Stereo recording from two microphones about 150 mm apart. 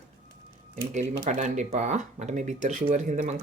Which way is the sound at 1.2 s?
50° right (ahead or behind).